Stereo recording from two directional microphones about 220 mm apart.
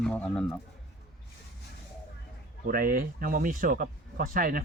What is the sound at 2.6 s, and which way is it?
Speech, 40° right (ahead or behind).